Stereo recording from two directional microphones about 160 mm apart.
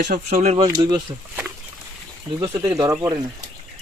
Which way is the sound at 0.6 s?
25° right (ahead or behind).